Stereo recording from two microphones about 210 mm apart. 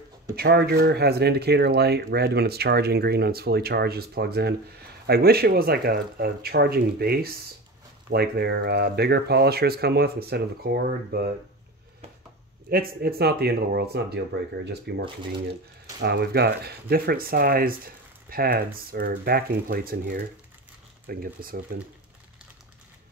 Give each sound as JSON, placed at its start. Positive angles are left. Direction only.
{"t": 0.4, "sound": "speech", "side_deg": -50}
{"t": 12.6, "sound": "speech", "side_deg": -45}